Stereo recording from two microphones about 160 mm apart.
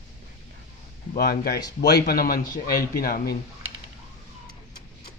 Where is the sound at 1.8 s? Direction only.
85° left; by 3.4 s 70° left (ahead or behind).